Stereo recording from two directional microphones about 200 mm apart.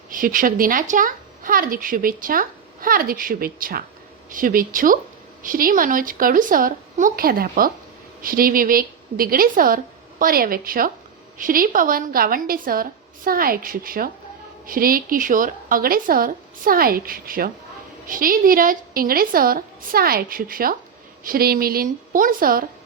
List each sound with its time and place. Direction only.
0.1 s speech: 45° right (ahead or behind)